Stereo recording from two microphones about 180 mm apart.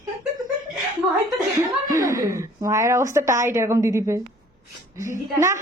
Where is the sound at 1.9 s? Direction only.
15° right (ahead or behind).